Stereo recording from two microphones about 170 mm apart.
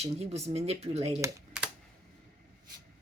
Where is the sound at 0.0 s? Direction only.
40° right (ahead or behind).